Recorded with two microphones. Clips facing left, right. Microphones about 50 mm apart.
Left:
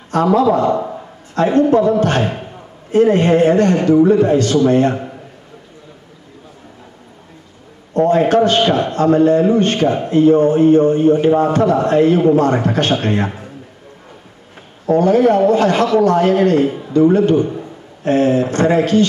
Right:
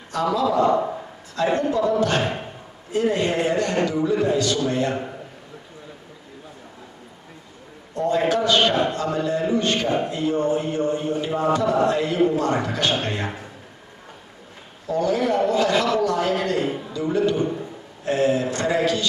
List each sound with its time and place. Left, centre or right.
0.1 s a man's voice: left
7.9 s a man's voice: left
14.9 s a man's voice: left